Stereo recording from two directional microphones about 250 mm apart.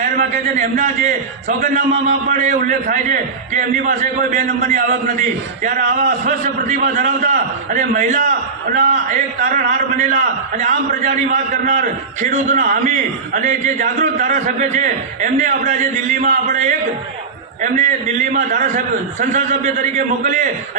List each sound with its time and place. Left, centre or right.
0.0 s a man's voice: right
6.2 s a man's voice: right